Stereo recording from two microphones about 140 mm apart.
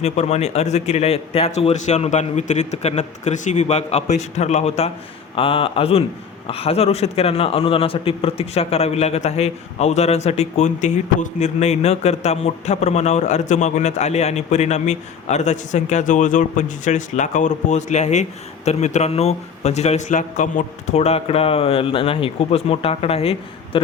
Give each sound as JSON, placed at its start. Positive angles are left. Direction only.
{"t": 0.0, "sound": "a man's voice", "side_deg": 50}
{"t": 5.3, "sound": "a man's voice", "side_deg": 40}